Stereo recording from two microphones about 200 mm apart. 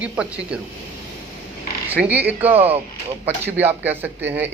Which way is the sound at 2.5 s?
30° right (ahead or behind).